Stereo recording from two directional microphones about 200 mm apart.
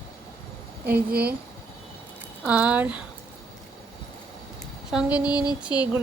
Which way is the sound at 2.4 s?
5° right (ahead or behind).